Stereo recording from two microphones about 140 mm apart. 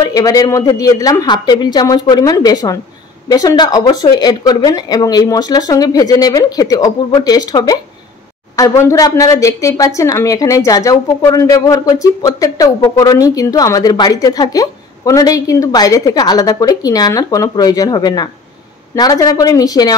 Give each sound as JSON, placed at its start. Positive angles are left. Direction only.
{"t": 0.0, "sound": "speech", "side_deg": 25}